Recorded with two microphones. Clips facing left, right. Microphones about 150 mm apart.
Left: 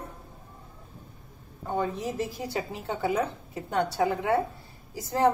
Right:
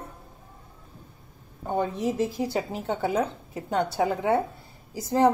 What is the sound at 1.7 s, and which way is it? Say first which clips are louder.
A woman's voice: right 3 dB; 25° right (ahead or behind).